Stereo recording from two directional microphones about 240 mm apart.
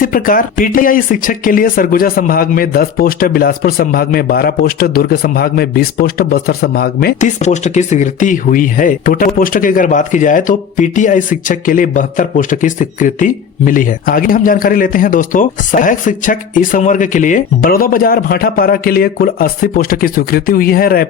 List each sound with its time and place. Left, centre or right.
0.0 s speech: left